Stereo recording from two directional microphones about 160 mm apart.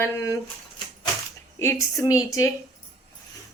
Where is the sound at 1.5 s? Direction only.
20° left (ahead or behind).